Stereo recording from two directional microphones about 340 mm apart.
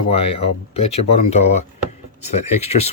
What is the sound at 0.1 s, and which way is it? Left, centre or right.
Speech, centre.